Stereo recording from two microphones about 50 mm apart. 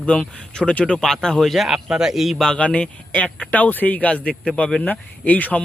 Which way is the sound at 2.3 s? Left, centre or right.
Centre.